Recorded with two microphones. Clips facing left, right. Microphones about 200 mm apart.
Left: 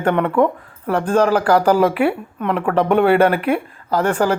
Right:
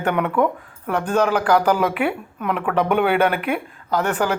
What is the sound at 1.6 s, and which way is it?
Speech, 30° left (ahead or behind).